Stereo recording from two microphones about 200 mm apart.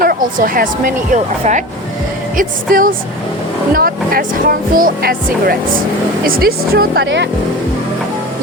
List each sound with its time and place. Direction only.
0.0 s speech: 45° right (ahead or behind)